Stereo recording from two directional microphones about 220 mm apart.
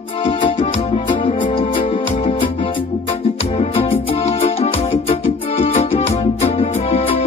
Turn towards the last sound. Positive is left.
turn(degrees=25)  # may be behind; listen again after turning